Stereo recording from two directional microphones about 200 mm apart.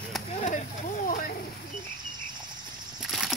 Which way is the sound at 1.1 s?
45° left (ahead or behind).